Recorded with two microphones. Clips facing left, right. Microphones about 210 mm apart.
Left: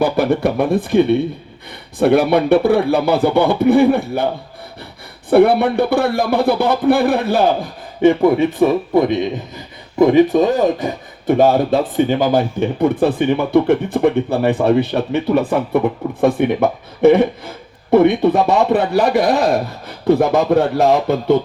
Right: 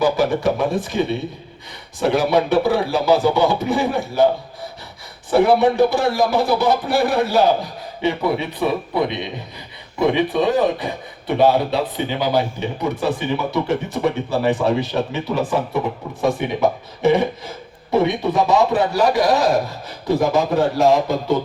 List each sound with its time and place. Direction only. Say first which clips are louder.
0.0 s speech: left 2 dB; 60° left (ahead or behind)
5.3 s speech: left 3 dB; 60° left (ahead or behind)